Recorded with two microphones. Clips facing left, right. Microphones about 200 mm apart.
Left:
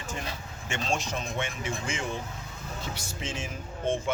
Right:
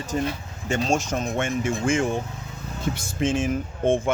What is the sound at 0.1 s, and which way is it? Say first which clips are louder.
Speech: right 11 dB; 40° right (ahead or behind).